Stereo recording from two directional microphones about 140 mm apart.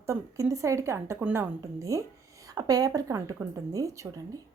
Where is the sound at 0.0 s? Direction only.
20° right (ahead or behind).